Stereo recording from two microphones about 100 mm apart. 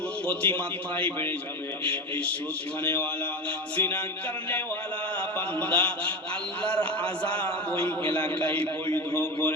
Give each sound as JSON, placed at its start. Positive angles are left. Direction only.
{"t": 0.3, "sound": "a man's voice", "side_deg": 15}
{"t": 5.5, "sound": "a man's voice", "side_deg": 15}